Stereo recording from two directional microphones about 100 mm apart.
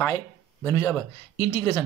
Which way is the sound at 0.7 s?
35° left (ahead or behind).